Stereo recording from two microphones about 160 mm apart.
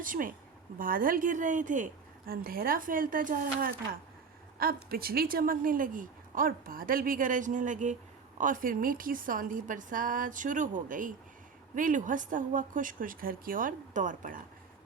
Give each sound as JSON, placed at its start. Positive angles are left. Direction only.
{"t": 0.0, "sound": "speech", "side_deg": -60}
{"t": 4.5, "sound": "speech", "side_deg": -70}